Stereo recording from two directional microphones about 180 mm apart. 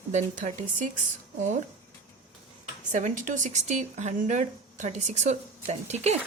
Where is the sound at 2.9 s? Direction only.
45° right (ahead or behind).